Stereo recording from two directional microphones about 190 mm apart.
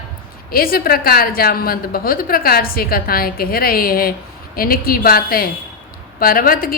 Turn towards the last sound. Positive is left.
turn(degrees=50)  # may be behind; listen again after turning